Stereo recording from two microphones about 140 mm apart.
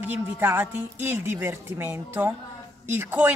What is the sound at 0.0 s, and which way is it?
Speech, 15° right (ahead or behind).